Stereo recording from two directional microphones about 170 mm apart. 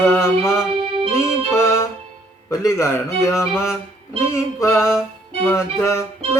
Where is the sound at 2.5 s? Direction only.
15° left (ahead or behind).